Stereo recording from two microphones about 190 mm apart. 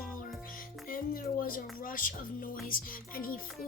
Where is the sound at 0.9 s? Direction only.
50° left (ahead or behind).